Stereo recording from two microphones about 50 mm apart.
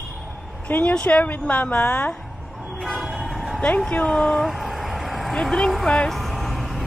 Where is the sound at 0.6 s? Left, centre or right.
Left.